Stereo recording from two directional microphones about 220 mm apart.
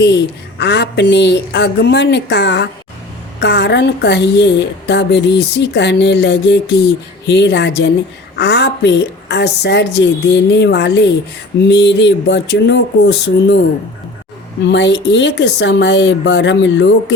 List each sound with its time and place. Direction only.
0.6 s a woman's voice: 50° left (ahead or behind)
14.7 s a woman's voice: 55° left (ahead or behind)